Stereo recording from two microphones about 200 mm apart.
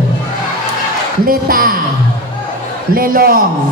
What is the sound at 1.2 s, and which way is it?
Speech, 45° right (ahead or behind).